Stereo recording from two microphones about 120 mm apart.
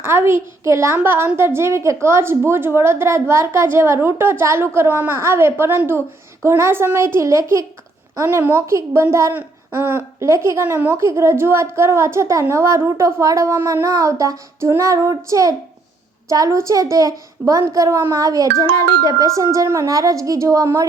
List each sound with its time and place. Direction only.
0.0 s a child's voice: 20° right (ahead or behind)